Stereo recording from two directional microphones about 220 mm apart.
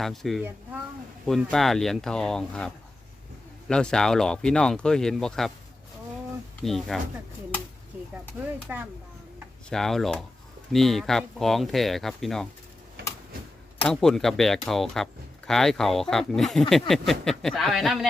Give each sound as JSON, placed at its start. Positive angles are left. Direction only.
{"t": 0.0, "sound": "speech", "side_deg": 0}
{"t": 6.7, "sound": "speech", "side_deg": 0}
{"t": 8.7, "sound": "speech", "side_deg": -5}
{"t": 13.0, "sound": "a sound", "side_deg": -45}
{"t": 13.8, "sound": "speech", "side_deg": 0}